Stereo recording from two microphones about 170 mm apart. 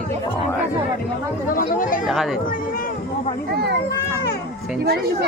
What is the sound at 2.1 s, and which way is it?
Speech, centre (ahead or behind).